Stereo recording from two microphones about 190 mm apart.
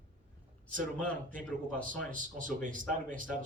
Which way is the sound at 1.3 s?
45° right (ahead or behind).